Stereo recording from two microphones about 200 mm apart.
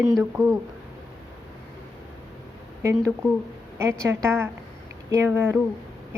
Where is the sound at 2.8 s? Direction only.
15° right (ahead or behind).